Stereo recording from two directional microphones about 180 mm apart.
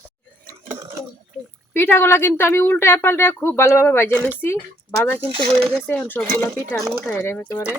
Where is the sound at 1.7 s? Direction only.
10° left (ahead or behind).